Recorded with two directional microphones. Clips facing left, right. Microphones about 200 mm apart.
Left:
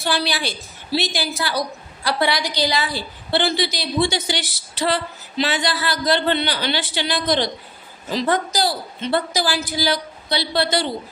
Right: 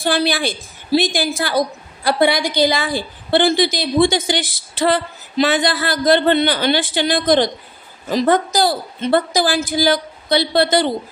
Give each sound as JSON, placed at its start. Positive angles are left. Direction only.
{"t": 0.0, "sound": "a woman's voice", "side_deg": -50}